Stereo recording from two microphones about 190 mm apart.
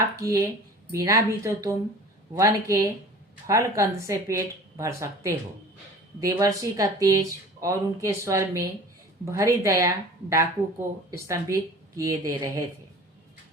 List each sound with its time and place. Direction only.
0.2 s speech: 15° right (ahead or behind)